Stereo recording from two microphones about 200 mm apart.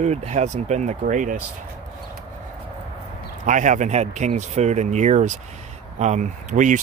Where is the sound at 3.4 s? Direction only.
40° right (ahead or behind).